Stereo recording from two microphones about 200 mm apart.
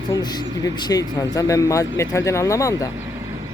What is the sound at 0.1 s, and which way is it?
Speech, 20° left (ahead or behind).